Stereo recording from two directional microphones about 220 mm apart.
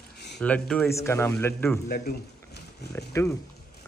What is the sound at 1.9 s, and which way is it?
Speech, 45° left (ahead or behind).